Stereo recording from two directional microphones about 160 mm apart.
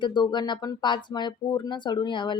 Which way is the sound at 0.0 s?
30° left (ahead or behind).